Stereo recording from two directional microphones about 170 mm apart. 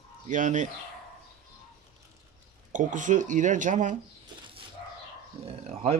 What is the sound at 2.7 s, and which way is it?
A man's voice, 50° right (ahead or behind).